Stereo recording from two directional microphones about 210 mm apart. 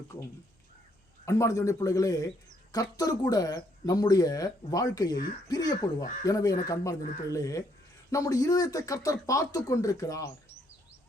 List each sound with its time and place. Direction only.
1.2 s speech: 15° left (ahead or behind)